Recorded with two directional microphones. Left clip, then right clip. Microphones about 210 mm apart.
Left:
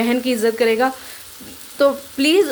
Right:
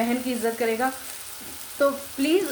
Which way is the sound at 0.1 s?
55° left (ahead or behind).